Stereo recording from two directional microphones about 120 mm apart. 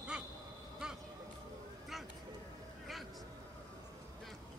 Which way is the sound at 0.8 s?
5° right (ahead or behind).